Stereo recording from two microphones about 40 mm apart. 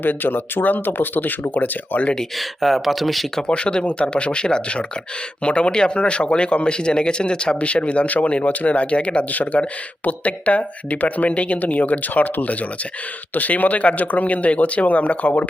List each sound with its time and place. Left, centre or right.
0.0 s speech: left
2.6 s speech: centre
3.4 s speech: left